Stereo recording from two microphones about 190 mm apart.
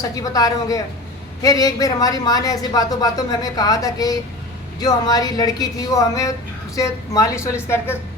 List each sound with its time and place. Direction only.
0.0 s a woman's voice: 20° left (ahead or behind)